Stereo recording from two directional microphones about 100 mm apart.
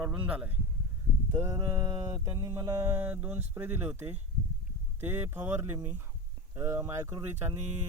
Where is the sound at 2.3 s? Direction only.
35° right (ahead or behind).